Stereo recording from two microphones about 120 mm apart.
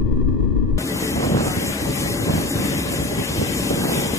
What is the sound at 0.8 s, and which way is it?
Vehicle, 25° left (ahead or behind).